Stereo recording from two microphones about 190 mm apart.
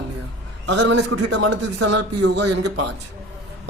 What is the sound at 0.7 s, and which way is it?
A man's voice, 70° right (ahead or behind).